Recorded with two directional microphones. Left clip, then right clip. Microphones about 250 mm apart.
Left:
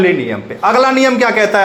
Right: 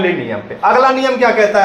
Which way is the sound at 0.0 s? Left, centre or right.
Left.